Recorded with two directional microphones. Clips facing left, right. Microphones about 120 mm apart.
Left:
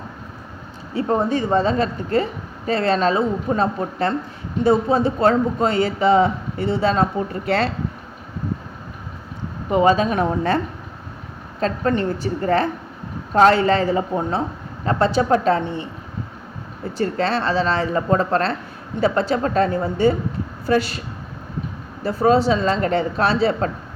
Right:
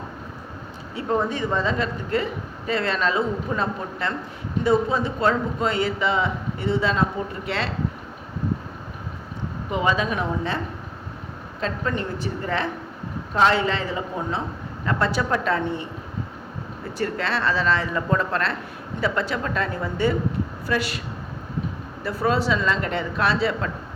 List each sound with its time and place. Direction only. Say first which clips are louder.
0.9 s speech: left 4 dB; 35° left (ahead or behind)
9.7 s speech: left 7 dB; 40° left (ahead or behind)
11.6 s speech: left 6 dB; 45° left (ahead or behind)
14.8 s a woman's voice: left 6 dB; 30° left (ahead or behind)
17.0 s speech: left 4 dB; 30° left (ahead or behind)
22.0 s speech: left 6 dB; 30° left (ahead or behind)